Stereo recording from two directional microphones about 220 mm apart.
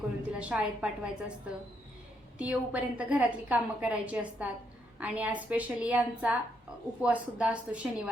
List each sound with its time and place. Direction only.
0.3 s a woman's voice: 5° right (ahead or behind)
2.4 s a woman's voice: 5° right (ahead or behind)